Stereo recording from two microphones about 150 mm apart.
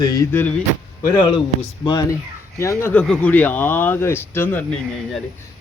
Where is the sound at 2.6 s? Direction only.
15° left (ahead or behind).